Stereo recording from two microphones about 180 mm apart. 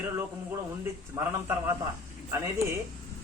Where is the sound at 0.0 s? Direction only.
15° right (ahead or behind).